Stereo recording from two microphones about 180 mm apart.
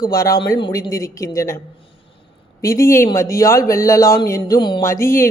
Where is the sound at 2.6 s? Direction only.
15° left (ahead or behind).